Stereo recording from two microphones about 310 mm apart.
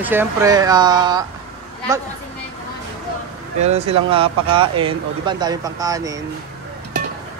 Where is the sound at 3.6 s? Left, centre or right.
Centre.